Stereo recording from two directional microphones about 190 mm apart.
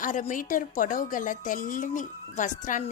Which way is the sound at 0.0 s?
40° left (ahead or behind).